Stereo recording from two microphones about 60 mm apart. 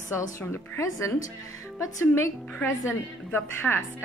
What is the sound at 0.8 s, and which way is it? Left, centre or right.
Speech, left.